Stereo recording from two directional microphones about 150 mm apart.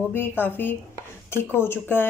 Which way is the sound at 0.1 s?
15° left (ahead or behind).